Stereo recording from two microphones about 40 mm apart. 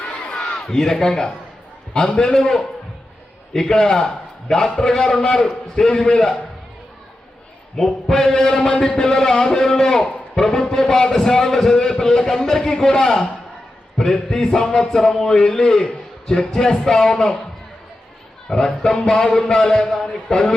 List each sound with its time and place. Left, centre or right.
0.3 s a man's voice: centre
7.8 s speech: centre
18.4 s speech: centre